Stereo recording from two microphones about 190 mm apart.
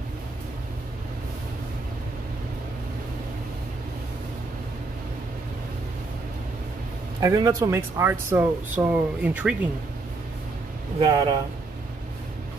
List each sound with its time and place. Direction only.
7.2 s speech: 15° right (ahead or behind)
11.0 s speech: 25° right (ahead or behind)